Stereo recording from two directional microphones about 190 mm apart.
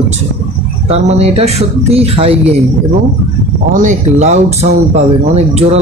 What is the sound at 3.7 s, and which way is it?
Speech, 40° right (ahead or behind).